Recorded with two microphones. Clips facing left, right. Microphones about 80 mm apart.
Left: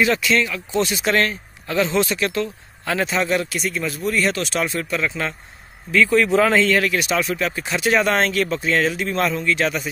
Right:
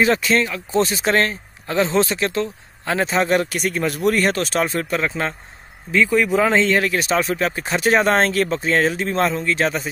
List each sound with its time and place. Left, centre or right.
0.0 s speech: right
5.9 s speech: centre
6.5 s speech: right